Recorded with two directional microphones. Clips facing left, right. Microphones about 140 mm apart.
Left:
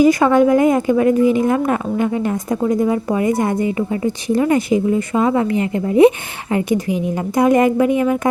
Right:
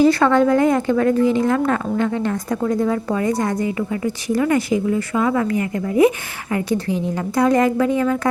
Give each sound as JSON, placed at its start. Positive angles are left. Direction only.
{"t": 0.0, "sound": "a woman's voice", "side_deg": 15}